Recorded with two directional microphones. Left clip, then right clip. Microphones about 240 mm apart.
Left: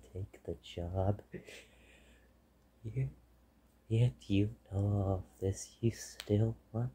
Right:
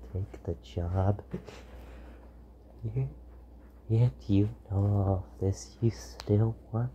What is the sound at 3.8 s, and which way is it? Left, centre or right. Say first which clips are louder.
A woman's voice: right 5 dB; centre.